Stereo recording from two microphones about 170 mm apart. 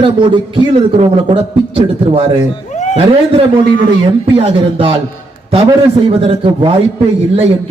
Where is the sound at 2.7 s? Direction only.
40° left (ahead or behind).